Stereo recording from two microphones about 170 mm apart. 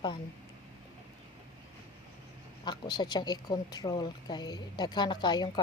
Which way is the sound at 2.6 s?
25° left (ahead or behind).